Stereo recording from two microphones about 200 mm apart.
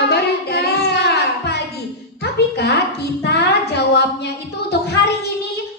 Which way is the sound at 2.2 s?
55° left (ahead or behind).